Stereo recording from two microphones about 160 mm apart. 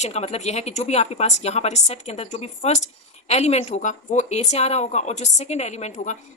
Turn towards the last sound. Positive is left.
turn(degrees=45)  # may be behind; listen again after turning